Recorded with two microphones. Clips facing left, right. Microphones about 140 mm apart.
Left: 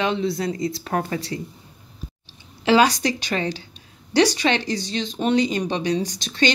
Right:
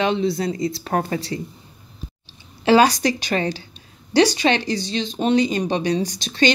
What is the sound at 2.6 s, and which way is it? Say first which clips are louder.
Speech: right 2 dB; 40° right (ahead or behind).